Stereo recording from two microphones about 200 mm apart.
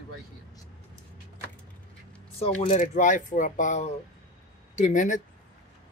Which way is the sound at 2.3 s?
30° left (ahead or behind).